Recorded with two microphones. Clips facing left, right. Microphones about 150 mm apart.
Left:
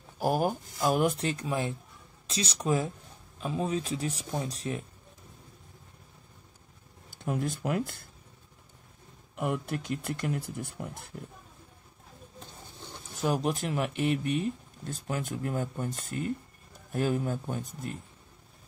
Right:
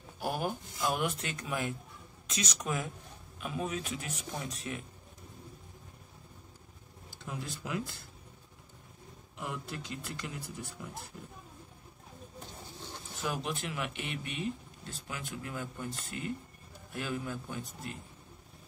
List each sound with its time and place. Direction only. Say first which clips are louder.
0.2 s speech: left 7 dB; 40° left (ahead or behind)
7.2 s a man's voice: left 9 dB; 55° left (ahead or behind)
9.4 s speech: left 9 dB; 55° left (ahead or behind)
13.2 s a man's voice: left 7 dB; 40° left (ahead or behind)